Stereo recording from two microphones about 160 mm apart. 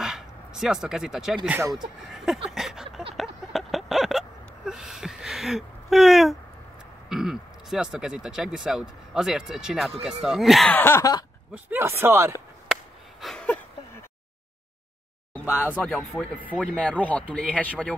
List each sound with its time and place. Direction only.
0.0 s speech: 5° right (ahead or behind)
1.6 s speech: 20° right (ahead or behind)
2.1 s speech: centre (ahead or behind)
2.5 s a sound: 5° right (ahead or behind)
7.1 s speech: centre (ahead or behind)
10.7 s speech: 15° left (ahead or behind)
11.5 s speech: 15° right (ahead or behind)
13.2 s a sound: 5° left (ahead or behind)
15.3 s speech: 10° left (ahead or behind)